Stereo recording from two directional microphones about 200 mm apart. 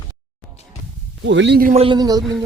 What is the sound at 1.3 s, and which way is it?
Speech, 60° right (ahead or behind).